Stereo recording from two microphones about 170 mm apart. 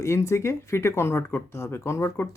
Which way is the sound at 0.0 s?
15° left (ahead or behind).